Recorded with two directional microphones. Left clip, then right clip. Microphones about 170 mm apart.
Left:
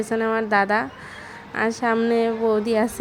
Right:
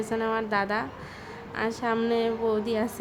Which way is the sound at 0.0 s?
25° left (ahead or behind).